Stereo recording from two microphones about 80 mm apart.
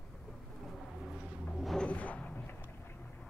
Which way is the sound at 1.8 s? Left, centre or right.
Centre.